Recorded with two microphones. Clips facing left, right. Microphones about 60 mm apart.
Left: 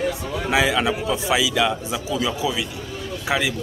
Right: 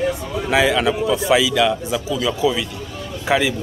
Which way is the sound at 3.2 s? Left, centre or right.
Centre.